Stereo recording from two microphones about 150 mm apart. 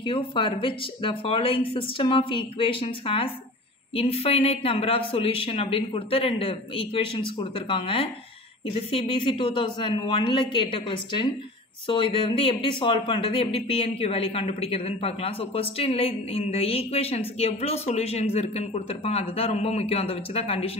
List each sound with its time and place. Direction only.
0.0 s speech: 35° left (ahead or behind)